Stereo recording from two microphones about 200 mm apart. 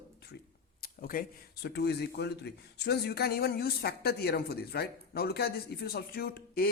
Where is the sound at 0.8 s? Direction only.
45° left (ahead or behind).